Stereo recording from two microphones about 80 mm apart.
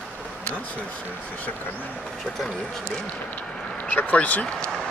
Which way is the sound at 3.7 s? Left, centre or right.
Centre.